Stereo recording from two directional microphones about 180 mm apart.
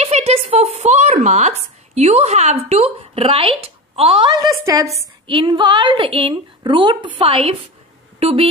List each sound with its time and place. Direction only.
0.0 s speech: 35° right (ahead or behind); by 4.8 s 20° right (ahead or behind)
4.8 s a woman's voice: centre (ahead or behind)
5.2 s a woman's voice: 25° right (ahead or behind)